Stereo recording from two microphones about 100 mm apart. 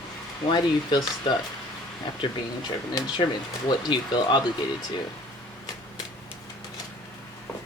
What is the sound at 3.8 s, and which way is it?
Speech, 45° left (ahead or behind).